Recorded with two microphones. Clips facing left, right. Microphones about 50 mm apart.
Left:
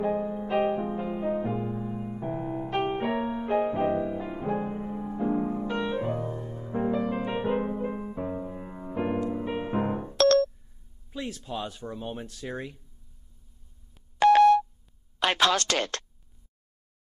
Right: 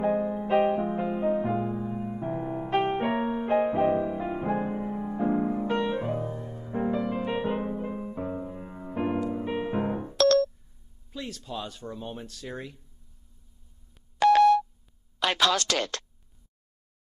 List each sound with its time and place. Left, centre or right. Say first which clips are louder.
0.0 s music: right 2 dB; centre
10.1 s music: left 1 dB; left
11.1 s speech: left 2 dB; centre
14.2 s busy signal: left 1 dB; left
15.1 s a sound: left 1 dB; left